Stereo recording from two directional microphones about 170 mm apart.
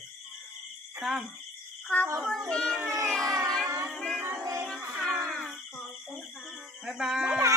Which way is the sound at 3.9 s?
5° left (ahead or behind).